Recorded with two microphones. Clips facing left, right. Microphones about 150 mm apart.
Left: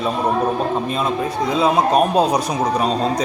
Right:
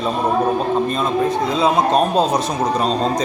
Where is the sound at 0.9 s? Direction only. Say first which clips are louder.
Right 3 dB; 5° left (ahead or behind).